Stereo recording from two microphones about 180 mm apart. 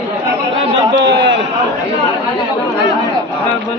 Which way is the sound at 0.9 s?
80° right.